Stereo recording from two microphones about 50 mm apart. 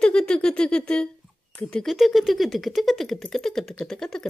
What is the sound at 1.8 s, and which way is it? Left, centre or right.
Speech, centre.